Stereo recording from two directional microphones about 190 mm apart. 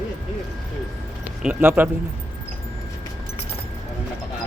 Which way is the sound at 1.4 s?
10° right (ahead or behind).